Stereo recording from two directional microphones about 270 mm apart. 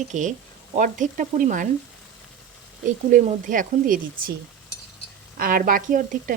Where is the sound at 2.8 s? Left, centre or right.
Right.